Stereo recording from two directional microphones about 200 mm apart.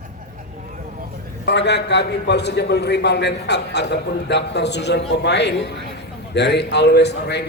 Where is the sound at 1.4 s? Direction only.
60° left (ahead or behind).